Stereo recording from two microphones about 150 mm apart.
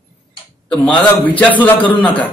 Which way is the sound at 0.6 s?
5° left (ahead or behind).